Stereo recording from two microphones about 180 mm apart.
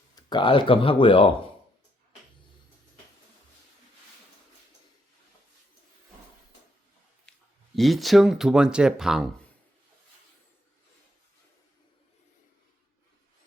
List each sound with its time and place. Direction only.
0.2 s speech: 25° left (ahead or behind)
7.3 s a sound: 5° left (ahead or behind)
7.8 s speech: centre (ahead or behind)